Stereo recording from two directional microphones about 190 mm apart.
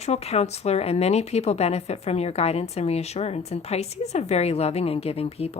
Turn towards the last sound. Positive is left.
turn(degrees=30)  # may be behind; listen again after turning